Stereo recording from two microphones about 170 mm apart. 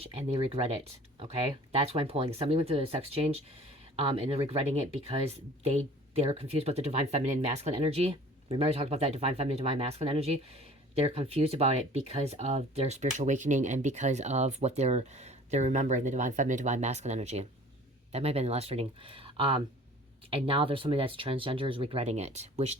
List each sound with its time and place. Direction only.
0.0 s speech: 35° right (ahead or behind)
1.7 s speech: 35° right (ahead or behind)